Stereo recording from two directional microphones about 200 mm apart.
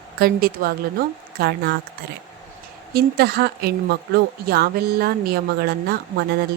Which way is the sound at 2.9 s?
50° right (ahead or behind).